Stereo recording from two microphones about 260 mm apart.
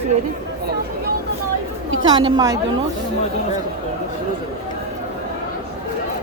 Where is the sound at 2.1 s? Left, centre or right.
Centre.